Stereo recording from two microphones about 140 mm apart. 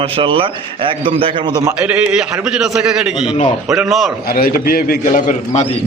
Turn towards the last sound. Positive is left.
turn(degrees=70)  # may be behind; listen again after turning